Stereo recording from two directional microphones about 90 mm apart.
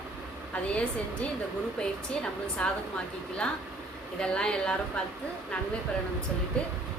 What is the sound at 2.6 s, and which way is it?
Speech, 15° left (ahead or behind).